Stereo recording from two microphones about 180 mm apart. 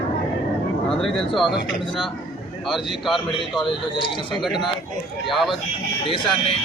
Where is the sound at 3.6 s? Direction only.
25° left (ahead or behind).